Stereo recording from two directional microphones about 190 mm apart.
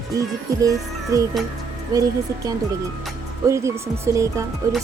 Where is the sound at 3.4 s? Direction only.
15° right (ahead or behind).